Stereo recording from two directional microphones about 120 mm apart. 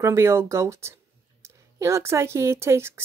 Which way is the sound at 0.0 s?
25° right (ahead or behind).